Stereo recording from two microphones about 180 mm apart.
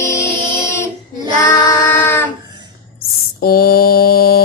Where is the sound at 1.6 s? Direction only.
10° left (ahead or behind).